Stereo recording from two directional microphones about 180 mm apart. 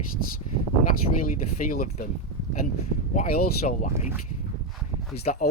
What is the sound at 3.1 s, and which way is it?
Speech, 45° left (ahead or behind).